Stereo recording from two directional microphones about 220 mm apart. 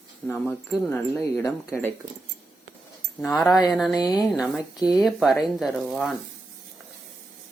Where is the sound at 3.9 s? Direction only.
20° left (ahead or behind).